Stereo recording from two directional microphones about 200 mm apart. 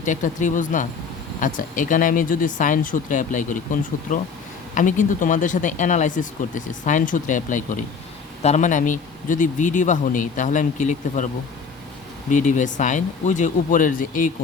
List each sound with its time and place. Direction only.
0.0 s speech: 40° left (ahead or behind)
12.3 s speech: 35° left (ahead or behind)